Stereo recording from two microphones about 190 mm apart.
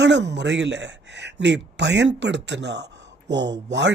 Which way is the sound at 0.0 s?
65° right (ahead or behind).